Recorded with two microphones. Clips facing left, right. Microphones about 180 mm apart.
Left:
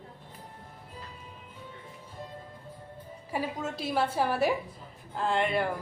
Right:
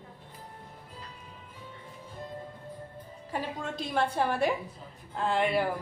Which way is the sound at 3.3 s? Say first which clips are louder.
Left 2 dB; 5° left (ahead or behind).